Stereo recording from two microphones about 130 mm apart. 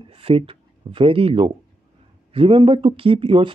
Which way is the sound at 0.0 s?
45° right (ahead or behind).